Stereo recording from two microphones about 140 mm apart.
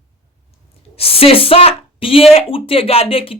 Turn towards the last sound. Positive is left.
turn(degrees=40)  # may be behind; listen again after turning